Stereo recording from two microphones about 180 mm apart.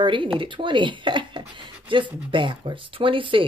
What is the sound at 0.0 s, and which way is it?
Speech, 30° right (ahead or behind).